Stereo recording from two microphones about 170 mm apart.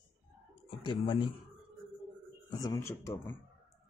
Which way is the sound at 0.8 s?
30° left (ahead or behind).